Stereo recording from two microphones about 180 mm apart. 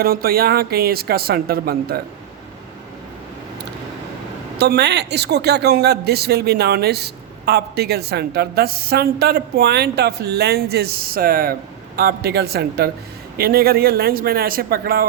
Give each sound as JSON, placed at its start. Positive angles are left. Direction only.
{"t": 0.0, "sound": "speech", "side_deg": -55}
{"t": 4.6, "sound": "speech", "side_deg": -65}